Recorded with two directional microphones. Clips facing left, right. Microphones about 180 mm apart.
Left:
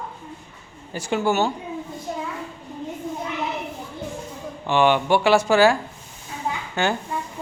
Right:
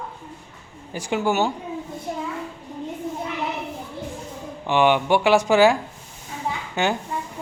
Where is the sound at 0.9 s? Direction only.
15° right (ahead or behind).